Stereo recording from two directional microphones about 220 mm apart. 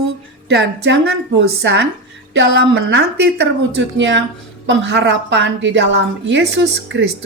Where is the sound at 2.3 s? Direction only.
60° right (ahead or behind).